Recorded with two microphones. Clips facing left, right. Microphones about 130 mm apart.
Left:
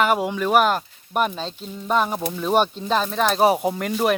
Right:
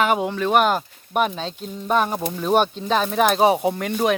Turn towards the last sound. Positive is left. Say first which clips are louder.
# right 1 dB
turn(degrees=0)  # may be behind; listen again after turning